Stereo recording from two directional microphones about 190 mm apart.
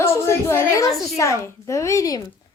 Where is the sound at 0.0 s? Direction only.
15° left (ahead or behind).